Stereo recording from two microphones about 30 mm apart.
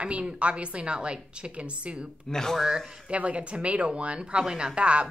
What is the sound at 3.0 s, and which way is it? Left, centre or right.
Speech, right.